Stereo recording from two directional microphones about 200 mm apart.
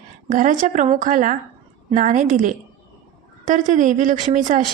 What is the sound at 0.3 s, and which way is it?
Speech, 40° right (ahead or behind).